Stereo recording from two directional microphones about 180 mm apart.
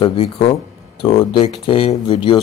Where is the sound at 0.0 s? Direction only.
30° left (ahead or behind).